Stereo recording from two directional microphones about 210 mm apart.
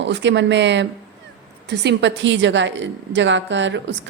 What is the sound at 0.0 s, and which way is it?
A woman's voice, 60° right (ahead or behind).